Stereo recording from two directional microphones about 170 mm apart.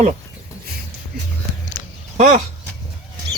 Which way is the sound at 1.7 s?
40° right (ahead or behind).